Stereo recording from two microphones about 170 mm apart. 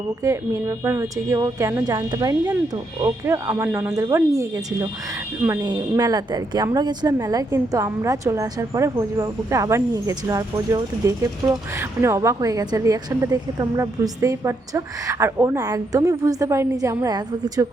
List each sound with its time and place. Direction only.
0.2 s a woman's voice: 20° right (ahead or behind)